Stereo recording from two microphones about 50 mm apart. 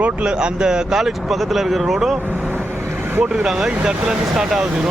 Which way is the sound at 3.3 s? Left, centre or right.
Centre.